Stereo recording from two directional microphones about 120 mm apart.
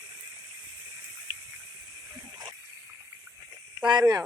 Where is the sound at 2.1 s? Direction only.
30° right (ahead or behind).